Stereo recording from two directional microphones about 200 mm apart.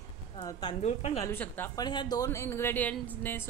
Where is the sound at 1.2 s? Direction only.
10° left (ahead or behind).